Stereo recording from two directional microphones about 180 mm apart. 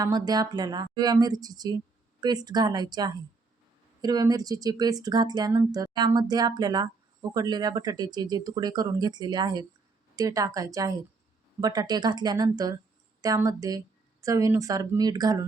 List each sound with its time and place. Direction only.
0.0 s speech: 20° right (ahead or behind)